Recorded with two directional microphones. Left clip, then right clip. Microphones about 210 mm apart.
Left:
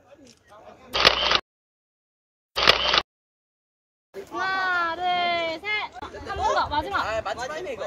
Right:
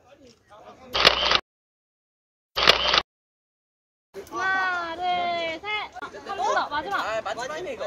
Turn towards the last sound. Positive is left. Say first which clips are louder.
# even
turn(degrees=5)  # may be behind; listen again after turning